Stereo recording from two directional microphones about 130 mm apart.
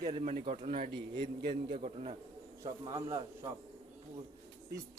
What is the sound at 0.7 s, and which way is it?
Speech, 40° right (ahead or behind).